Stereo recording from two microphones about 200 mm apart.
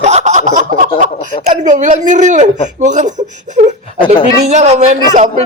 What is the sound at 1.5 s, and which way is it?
Speech, 40° right (ahead or behind).